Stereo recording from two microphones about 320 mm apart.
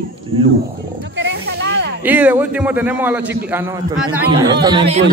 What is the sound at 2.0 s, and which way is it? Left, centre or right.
A man's voice, centre.